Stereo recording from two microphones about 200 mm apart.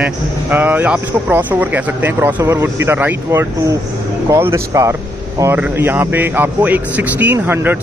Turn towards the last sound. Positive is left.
turn(degrees=-10)  # may be behind; listen again after turning